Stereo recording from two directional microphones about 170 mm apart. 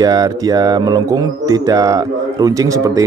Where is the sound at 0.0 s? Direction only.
20° right (ahead or behind).